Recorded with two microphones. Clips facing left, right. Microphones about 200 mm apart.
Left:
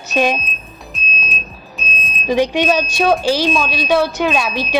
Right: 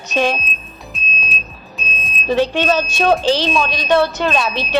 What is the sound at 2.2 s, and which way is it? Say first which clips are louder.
Speech: left 1 dB; 10° left (ahead or behind).